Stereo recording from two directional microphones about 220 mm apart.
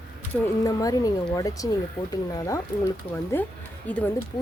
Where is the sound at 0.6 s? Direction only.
15° left (ahead or behind).